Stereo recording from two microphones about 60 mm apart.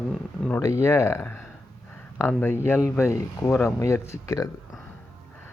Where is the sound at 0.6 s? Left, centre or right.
Left.